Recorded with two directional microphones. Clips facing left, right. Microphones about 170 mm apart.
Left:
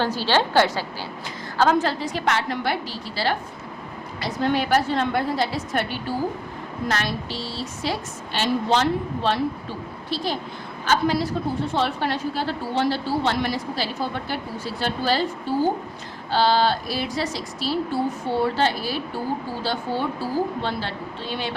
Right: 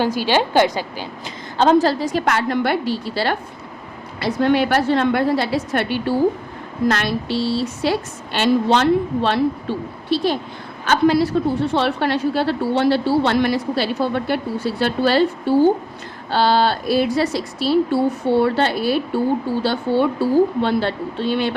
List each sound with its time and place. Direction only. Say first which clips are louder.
0.0 s a woman's voice: right 3 dB; 15° right (ahead or behind)
1.8 s a woman's voice: right 6 dB; 40° right (ahead or behind); by 3.3 s 60° right (ahead or behind)
4.5 s a woman's voice: right 2 dB; 70° right (ahead or behind)
10.8 s a woman's voice: right 6 dB; 70° right (ahead or behind)